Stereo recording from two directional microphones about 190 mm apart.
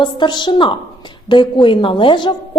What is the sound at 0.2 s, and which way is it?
A woman's voice, 25° left (ahead or behind).